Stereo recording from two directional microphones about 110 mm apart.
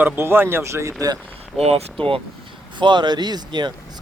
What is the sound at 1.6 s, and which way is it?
Speech, 70° right (ahead or behind).